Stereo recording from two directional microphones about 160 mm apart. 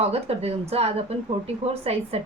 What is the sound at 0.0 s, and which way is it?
A woman's voice, 40° right (ahead or behind).